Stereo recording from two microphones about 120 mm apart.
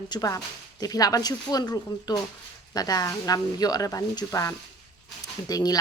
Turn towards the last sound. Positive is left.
turn(degrees=35)  # may be behind; listen again after turning